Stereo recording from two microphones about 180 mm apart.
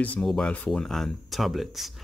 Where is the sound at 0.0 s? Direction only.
5° left (ahead or behind).